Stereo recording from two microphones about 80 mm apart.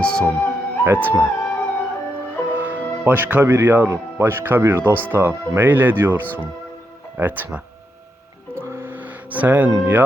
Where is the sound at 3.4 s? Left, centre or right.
Right.